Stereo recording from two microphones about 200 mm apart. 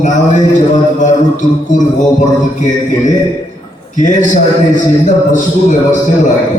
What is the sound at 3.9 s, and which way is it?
A man's voice, 40° left (ahead or behind).